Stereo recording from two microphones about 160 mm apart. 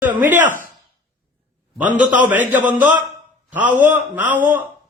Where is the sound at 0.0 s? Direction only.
10° right (ahead or behind).